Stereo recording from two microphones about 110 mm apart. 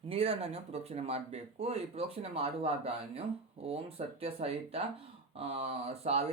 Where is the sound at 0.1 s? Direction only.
60° right (ahead or behind).